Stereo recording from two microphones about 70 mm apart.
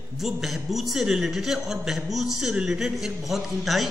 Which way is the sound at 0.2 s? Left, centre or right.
Centre.